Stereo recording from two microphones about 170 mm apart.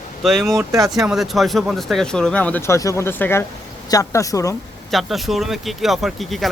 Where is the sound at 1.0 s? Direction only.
Centre (ahead or behind); by 4.5 s 20° left (ahead or behind).